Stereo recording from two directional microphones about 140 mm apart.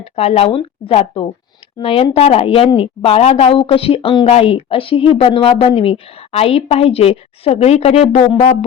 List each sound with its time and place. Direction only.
0.0 s speech: 45° left (ahead or behind)